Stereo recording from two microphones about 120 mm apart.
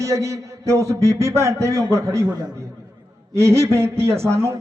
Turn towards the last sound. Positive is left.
turn(degrees=-20)  # may be behind; listen again after turning